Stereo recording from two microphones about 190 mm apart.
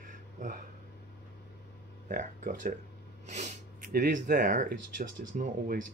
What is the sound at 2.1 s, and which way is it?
Speech, 45° right (ahead or behind).